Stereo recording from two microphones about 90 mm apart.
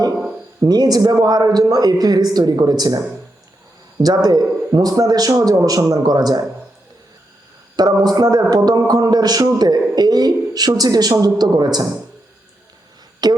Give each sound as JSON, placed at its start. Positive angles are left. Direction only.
{"t": 0.6, "sound": "a man's voice", "side_deg": -45}
{"t": 4.0, "sound": "a man's voice", "side_deg": -45}
{"t": 7.8, "sound": "a man's voice", "side_deg": -45}
{"t": 13.2, "sound": "speech", "side_deg": -50}